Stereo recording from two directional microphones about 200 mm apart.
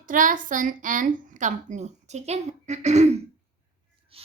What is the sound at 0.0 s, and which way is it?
A woman's voice, 40° right (ahead or behind).